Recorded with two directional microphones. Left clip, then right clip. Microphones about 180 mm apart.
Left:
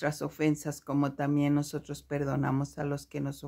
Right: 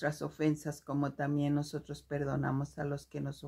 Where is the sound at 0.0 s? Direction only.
25° left (ahead or behind).